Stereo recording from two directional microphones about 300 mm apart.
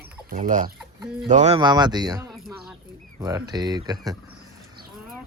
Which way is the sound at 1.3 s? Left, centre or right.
Right.